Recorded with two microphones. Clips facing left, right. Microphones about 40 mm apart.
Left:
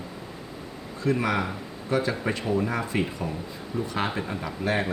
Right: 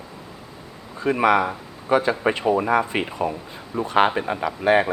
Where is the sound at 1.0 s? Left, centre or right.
Right.